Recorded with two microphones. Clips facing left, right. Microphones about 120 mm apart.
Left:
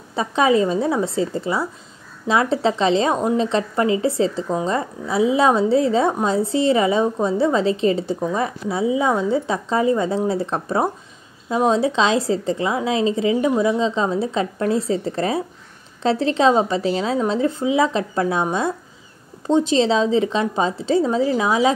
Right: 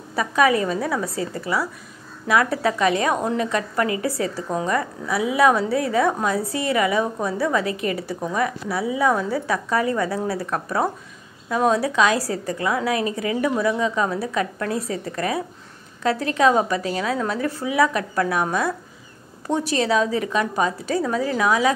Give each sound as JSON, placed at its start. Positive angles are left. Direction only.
{"t": 0.1, "sound": "a woman's voice", "side_deg": 25}